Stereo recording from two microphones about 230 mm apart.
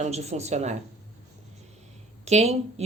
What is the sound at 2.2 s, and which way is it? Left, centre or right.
Speech, right.